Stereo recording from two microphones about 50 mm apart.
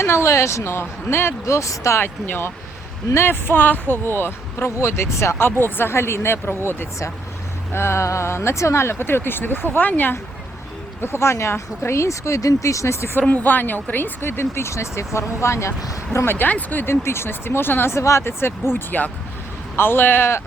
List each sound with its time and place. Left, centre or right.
0.0 s speech: left
1.5 s speech: left
2.0 s speech: left
4.0 s speech: left
5.4 s speech: left
7.7 s speech: left
11.0 s speech: left
13.2 s speech: left
16.2 s speech: left
16.5 s speech: left
16.8 s speech: left
17.9 s speech: left
18.7 s speech: left
19.7 s speech: left